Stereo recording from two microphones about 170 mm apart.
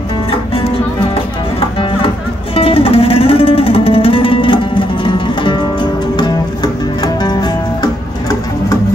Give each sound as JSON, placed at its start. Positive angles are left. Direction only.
{"t": 2.5, "sound": "music", "side_deg": 35}